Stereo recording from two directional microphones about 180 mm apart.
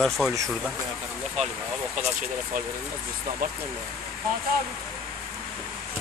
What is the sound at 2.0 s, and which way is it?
Speech, 50° right (ahead or behind).